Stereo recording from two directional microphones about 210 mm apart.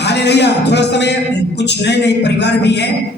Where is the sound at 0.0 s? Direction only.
55° left (ahead or behind).